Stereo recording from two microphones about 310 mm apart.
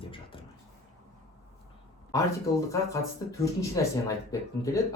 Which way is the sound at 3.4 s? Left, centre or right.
Centre.